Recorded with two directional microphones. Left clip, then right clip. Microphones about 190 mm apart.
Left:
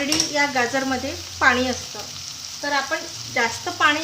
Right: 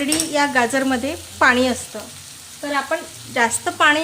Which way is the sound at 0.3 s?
50° right (ahead or behind).